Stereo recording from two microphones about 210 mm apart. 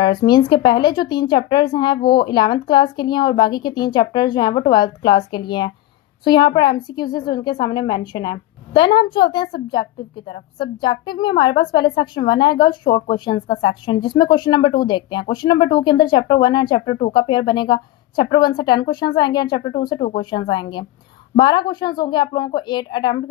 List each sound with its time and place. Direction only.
0.0 s speech: 20° left (ahead or behind)
7.1 s a woman's voice: 45° left (ahead or behind)
7.3 s speech: 20° left (ahead or behind)